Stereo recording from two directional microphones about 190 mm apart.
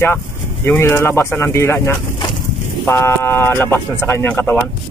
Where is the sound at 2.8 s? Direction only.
10° left (ahead or behind).